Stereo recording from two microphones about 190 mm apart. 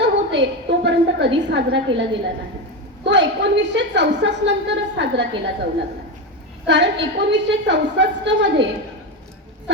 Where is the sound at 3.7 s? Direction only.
70° right (ahead or behind).